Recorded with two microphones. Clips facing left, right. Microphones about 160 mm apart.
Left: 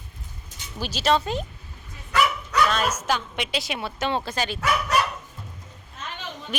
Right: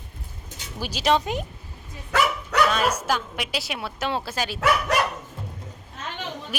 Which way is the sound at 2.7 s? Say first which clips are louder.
Right 1 dB; 10° right (ahead or behind).